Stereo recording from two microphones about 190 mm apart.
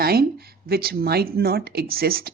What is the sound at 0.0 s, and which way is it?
Speech, 55° right (ahead or behind).